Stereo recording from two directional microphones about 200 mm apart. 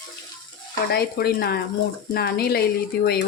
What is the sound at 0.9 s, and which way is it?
Speech, 55° left (ahead or behind).